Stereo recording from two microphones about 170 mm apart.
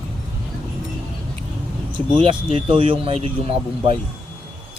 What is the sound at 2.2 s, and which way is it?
Speech, 30° right (ahead or behind).